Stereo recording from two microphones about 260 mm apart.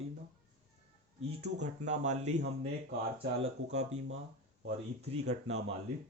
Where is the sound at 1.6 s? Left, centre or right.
Right.